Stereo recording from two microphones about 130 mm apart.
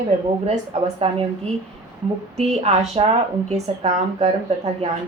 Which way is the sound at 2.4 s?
55° right (ahead or behind).